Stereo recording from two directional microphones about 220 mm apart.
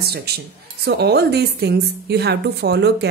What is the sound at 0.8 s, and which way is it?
A woman's voice, 50° right (ahead or behind).